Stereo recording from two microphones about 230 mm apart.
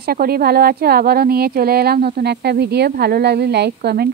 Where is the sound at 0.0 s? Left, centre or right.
Right.